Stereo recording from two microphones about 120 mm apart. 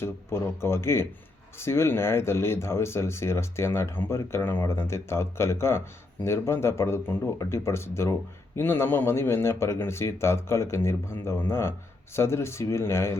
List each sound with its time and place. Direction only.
0.0 s speech: 20° left (ahead or behind)